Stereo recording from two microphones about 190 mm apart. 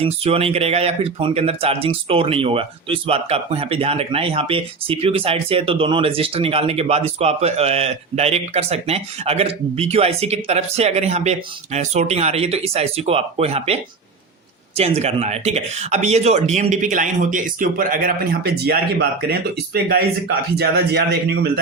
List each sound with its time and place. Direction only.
0.0 s speech: 30° right (ahead or behind)
14.8 s a man's voice: 35° right (ahead or behind); by 21.6 s 60° right (ahead or behind)